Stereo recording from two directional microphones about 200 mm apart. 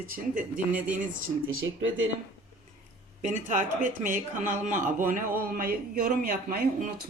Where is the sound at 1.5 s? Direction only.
85° right.